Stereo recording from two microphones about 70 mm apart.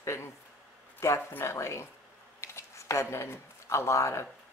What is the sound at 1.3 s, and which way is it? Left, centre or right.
Speech, left.